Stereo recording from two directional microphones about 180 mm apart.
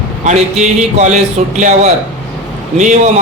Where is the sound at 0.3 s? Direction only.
40° right (ahead or behind).